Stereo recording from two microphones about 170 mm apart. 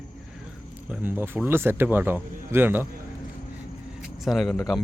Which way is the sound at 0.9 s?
10° right (ahead or behind).